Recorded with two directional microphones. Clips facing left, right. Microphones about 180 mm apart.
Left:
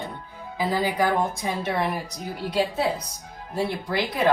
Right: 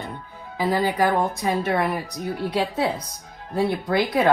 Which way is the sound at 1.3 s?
60° right (ahead or behind).